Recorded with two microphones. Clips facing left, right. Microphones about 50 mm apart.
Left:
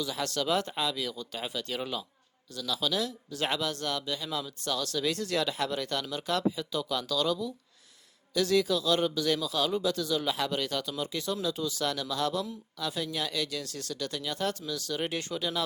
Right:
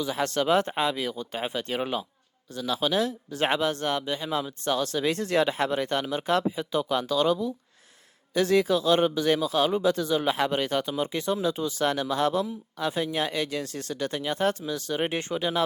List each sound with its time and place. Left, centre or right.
0.0 s speech: right